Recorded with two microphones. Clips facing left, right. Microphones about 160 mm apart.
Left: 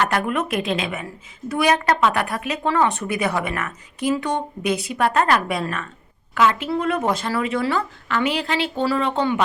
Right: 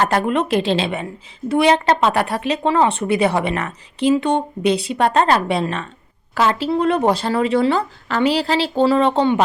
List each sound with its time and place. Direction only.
0.0 s a woman's voice: 30° right (ahead or behind)